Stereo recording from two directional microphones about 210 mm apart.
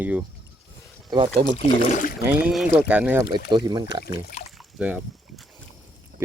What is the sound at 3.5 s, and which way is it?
Speech, 20° right (ahead or behind).